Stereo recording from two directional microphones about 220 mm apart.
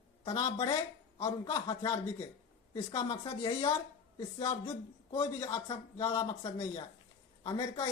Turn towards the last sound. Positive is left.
turn(degrees=15)  # may be behind; listen again after turning